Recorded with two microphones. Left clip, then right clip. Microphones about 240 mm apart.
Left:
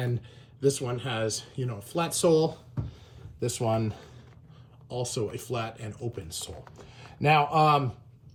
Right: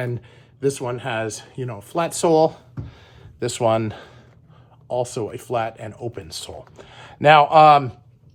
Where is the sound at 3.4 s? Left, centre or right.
Right.